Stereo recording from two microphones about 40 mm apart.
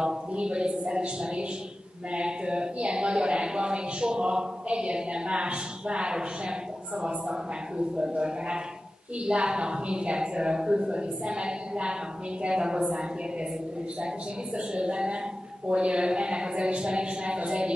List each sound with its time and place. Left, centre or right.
0.3 s speech: right